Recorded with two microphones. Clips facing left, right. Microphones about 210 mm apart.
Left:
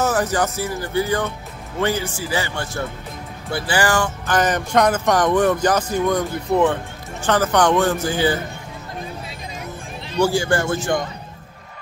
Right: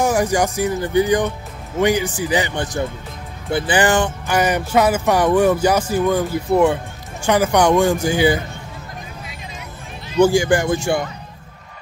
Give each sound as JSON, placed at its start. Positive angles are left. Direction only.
{"t": 0.0, "sound": "speech", "side_deg": -15}
{"t": 4.3, "sound": "speech", "side_deg": -10}
{"t": 10.2, "sound": "speech", "side_deg": -15}